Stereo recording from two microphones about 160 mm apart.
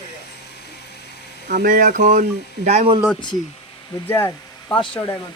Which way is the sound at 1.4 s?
55° right (ahead or behind).